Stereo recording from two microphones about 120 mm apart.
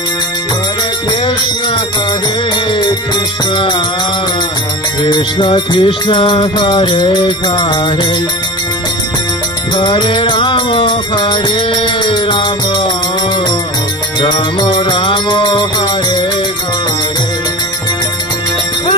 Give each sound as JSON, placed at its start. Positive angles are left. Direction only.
{"t": 5.0, "sound": "music", "side_deg": 45}
{"t": 9.8, "sound": "music", "side_deg": 45}
{"t": 14.2, "sound": "music", "side_deg": 50}